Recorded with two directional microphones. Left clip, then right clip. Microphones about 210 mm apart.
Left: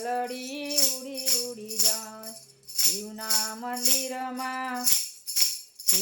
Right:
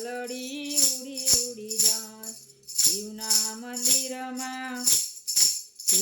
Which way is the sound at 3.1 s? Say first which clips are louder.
Right 1 dB; centre (ahead or behind).